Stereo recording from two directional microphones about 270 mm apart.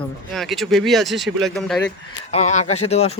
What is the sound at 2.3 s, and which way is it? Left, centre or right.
Speech, left.